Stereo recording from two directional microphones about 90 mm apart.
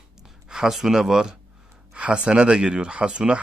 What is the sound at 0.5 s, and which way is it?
Speech, 5° right (ahead or behind).